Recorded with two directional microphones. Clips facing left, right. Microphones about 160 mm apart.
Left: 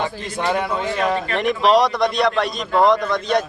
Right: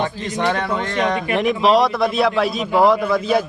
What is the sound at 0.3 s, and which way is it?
A man's voice, 10° left (ahead or behind).